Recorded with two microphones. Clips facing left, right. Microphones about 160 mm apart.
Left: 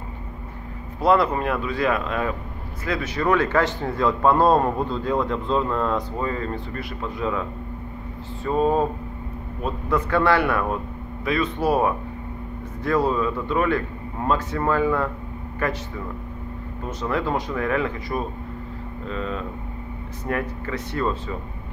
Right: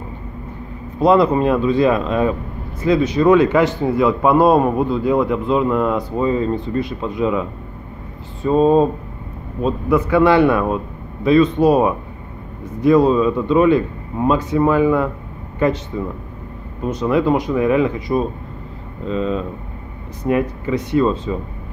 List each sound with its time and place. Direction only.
0.9 s speech: 20° right (ahead or behind)
9.8 s speech: 10° right (ahead or behind)
16.8 s speech: 15° right (ahead or behind)